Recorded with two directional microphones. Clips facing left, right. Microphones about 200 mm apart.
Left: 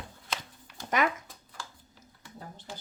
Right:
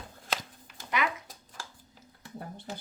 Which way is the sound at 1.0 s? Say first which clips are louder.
Left 4 dB; 45° left (ahead or behind).